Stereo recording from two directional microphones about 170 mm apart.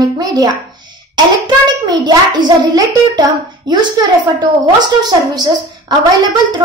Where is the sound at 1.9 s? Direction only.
25° right (ahead or behind).